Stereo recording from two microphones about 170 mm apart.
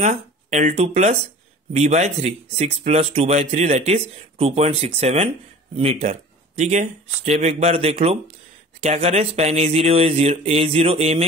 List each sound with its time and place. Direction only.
0.0 s speech: 40° right (ahead or behind)